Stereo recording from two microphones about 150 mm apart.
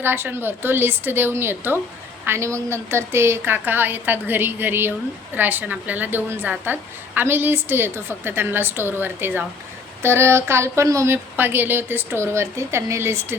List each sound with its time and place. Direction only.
0.0 s a woman's voice: 15° right (ahead or behind)